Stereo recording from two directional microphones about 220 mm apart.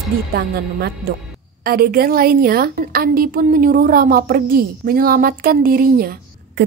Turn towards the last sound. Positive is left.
turn(degrees=-40)  # may be behind; listen again after turning